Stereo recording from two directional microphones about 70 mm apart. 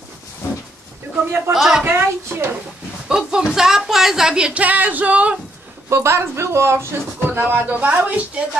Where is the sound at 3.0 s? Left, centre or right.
Centre.